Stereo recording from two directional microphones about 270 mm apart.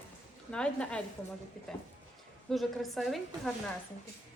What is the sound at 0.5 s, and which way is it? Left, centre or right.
Speech, centre.